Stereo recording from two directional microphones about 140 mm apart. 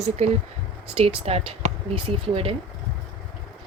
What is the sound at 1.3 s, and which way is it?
Speech, 45° right (ahead or behind).